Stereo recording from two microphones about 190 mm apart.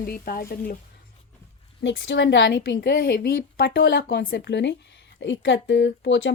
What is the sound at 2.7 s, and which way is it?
A woman's voice, 60° left (ahead or behind).